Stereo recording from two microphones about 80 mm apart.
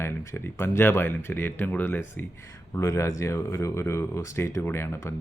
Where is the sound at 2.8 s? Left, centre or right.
Left.